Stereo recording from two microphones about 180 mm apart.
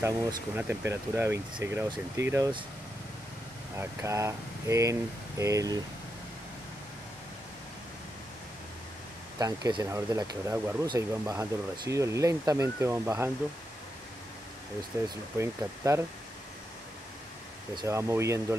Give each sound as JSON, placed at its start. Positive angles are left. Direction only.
{"t": 0.0, "sound": "speech", "side_deg": -15}
{"t": 3.7, "sound": "speech", "side_deg": -15}
{"t": 9.4, "sound": "speech", "side_deg": -20}
{"t": 15.3, "sound": "speech", "side_deg": -15}
{"t": 17.7, "sound": "speech", "side_deg": -15}